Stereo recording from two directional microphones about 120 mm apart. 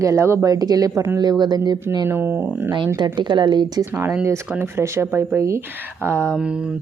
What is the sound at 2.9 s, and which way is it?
Speech, 40° right (ahead or behind).